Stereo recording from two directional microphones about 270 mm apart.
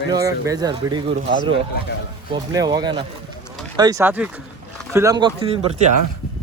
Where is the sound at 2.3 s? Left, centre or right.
Centre.